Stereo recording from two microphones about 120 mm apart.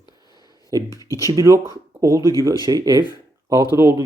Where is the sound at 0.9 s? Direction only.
30° left (ahead or behind).